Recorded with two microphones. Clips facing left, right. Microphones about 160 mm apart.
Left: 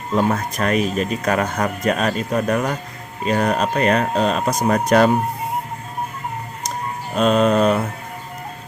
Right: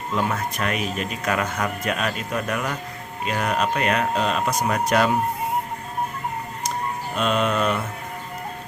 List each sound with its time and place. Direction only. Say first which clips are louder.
0.1 s speech: left 6 dB; 40° left (ahead or behind)
7.2 s speech: left 7 dB; 40° left (ahead or behind)